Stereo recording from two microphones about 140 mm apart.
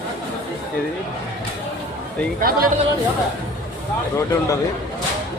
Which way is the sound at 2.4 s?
90° right.